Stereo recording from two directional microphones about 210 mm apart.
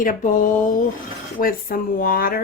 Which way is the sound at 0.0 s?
40° left (ahead or behind).